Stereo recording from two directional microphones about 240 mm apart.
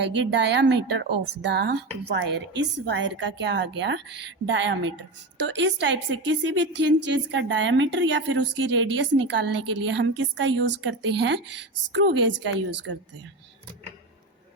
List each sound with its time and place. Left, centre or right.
0.0 s a woman's voice: right